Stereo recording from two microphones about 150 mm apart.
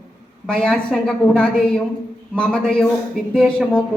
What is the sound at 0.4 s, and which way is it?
A woman's voice, 5° left (ahead or behind).